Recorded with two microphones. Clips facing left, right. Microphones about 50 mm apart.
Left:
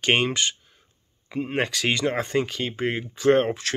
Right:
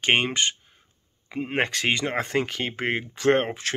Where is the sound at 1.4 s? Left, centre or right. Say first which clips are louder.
Right 1 dB; right.